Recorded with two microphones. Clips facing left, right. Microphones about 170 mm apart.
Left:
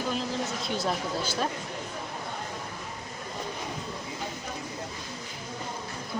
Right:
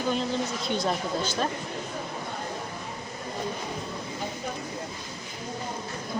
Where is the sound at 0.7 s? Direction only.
5° left (ahead or behind).